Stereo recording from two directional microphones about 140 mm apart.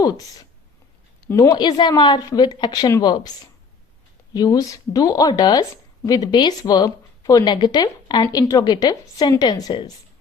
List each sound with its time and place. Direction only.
1.3 s speech: 25° left (ahead or behind)
4.4 s speech: 25° left (ahead or behind)